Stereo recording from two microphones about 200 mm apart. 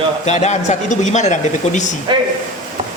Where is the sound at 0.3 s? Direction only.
35° left (ahead or behind).